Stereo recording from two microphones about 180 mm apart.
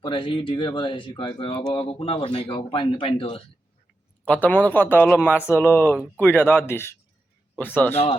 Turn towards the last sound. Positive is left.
turn(degrees=10)  # may be behind; listen again after turning